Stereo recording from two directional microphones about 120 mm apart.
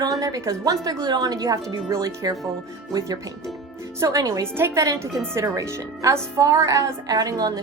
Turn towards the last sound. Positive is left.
turn(degrees=-35)  # may be behind; listen again after turning